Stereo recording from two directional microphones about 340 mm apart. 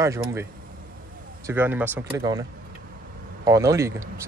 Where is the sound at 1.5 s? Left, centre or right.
Centre.